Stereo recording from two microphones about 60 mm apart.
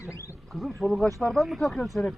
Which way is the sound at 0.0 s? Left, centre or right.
Left.